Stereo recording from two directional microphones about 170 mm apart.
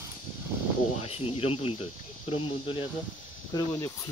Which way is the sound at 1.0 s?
35° left (ahead or behind).